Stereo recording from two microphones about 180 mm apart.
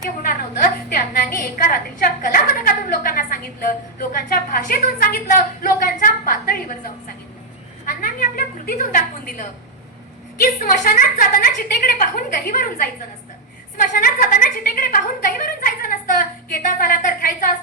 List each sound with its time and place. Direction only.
0.2 s a woman's voice: 50° left (ahead or behind)
8.0 s a woman's voice: 50° left (ahead or behind)